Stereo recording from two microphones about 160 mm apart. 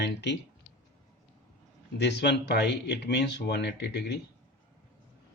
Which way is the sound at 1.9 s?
90° left.